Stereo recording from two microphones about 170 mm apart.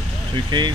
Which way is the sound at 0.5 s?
30° right (ahead or behind).